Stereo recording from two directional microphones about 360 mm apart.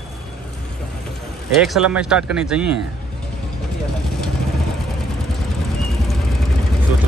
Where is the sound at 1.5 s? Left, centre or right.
Centre.